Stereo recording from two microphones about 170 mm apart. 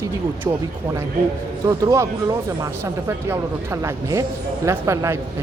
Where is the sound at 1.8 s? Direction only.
20° right (ahead or behind).